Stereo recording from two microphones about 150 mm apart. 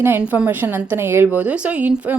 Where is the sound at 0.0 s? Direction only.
10° right (ahead or behind).